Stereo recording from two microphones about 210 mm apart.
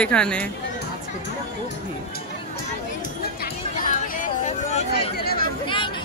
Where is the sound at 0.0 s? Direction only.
5° left (ahead or behind).